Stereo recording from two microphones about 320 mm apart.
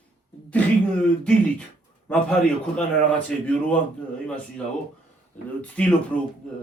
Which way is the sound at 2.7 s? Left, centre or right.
Centre.